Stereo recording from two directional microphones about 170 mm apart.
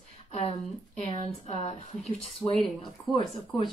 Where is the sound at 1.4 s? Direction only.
40° left (ahead or behind).